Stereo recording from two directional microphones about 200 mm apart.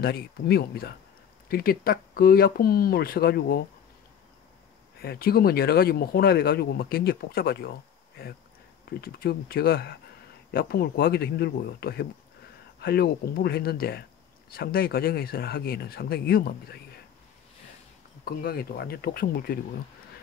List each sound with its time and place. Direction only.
0.0 s speech: 50° left (ahead or behind)
5.0 s speech: 50° left (ahead or behind)
9.0 s speech: 50° left (ahead or behind)
18.2 s speech: 50° left (ahead or behind)